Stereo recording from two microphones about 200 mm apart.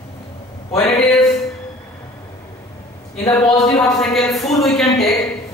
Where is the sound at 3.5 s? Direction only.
15° left (ahead or behind).